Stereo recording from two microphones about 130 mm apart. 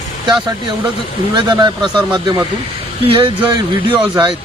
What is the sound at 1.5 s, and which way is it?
Speech, 35° right (ahead or behind).